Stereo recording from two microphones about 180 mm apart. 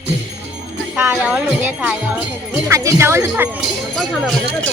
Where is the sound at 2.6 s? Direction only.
15° right (ahead or behind).